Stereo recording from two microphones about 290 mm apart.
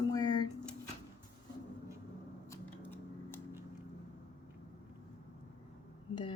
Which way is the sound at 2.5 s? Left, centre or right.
Centre.